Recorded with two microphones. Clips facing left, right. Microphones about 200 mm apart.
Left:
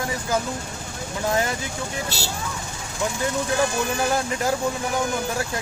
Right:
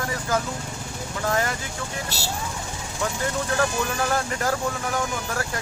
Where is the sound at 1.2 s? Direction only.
20° left (ahead or behind).